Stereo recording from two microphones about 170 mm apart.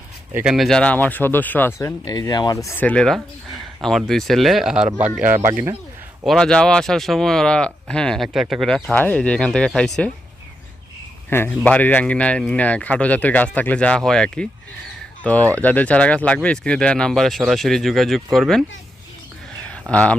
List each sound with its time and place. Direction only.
0.3 s speech: 5° right (ahead or behind)
2.0 s speech: 25° left (ahead or behind); by 5.7 s 15° right (ahead or behind)
6.2 s speech: 5° left (ahead or behind)
11.3 s speech: 10° left (ahead or behind)
19.9 s speech: 10° left (ahead or behind)